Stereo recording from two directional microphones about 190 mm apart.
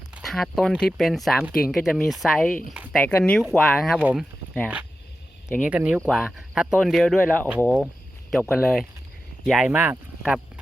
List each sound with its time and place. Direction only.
0.2 s speech: centre (ahead or behind)
5.6 s speech: 5° right (ahead or behind)